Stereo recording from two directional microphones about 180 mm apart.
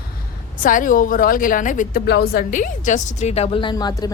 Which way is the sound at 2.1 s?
65° left (ahead or behind).